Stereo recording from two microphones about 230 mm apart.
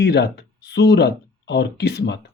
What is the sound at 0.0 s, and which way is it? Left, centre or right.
Speech, left.